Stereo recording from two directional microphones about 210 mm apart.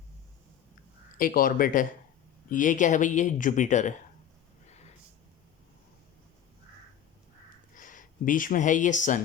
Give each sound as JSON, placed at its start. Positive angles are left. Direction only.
{"t": 1.2, "sound": "speech", "side_deg": 40}
{"t": 7.8, "sound": "speech", "side_deg": 40}